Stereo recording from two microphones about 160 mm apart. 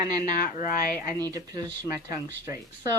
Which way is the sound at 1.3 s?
25° right (ahead or behind).